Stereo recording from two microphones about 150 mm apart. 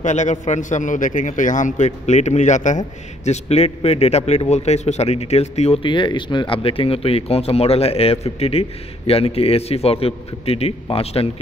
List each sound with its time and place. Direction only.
0.0 s a man's voice: 55° left (ahead or behind)